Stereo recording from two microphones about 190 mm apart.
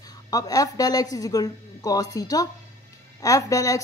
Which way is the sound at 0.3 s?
20° left (ahead or behind).